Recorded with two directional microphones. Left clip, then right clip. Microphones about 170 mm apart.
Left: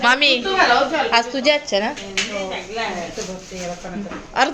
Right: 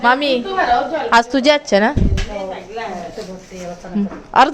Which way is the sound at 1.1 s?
75° right (ahead or behind).